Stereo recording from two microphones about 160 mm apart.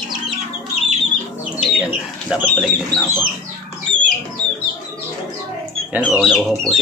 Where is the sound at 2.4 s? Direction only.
10° left (ahead or behind).